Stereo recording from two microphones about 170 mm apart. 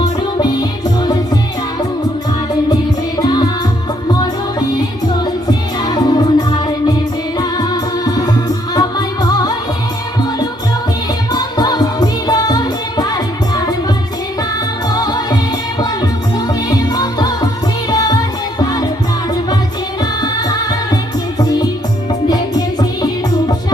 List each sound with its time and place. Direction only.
0.3 s music: 25° left (ahead or behind)
3.2 s music: 25° left (ahead or behind)
5.2 s music: 25° left (ahead or behind)
11.3 s music: 25° left (ahead or behind)
16.5 s music: 20° left (ahead or behind)
20.0 s music: 25° left (ahead or behind)